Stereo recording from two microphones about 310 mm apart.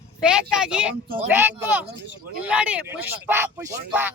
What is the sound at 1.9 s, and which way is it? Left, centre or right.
Speech, right.